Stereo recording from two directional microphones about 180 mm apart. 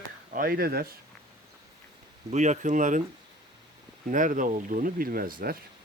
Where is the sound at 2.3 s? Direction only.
40° right (ahead or behind).